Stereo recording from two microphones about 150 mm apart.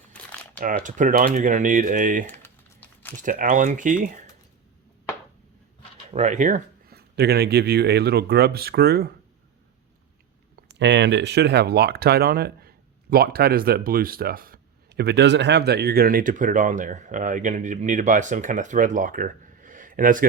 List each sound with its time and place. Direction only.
0.1 s crumpling: 10° left (ahead or behind)
0.6 s speech: 60° right (ahead or behind)
2.2 s typing: 15° left (ahead or behind)
3.2 s speech: 60° right (ahead or behind)
6.1 s speech: 45° right (ahead or behind)
6.8 s speech: 90° right
11.3 s speech: 90° right; by 20.2 s 65° right (ahead or behind)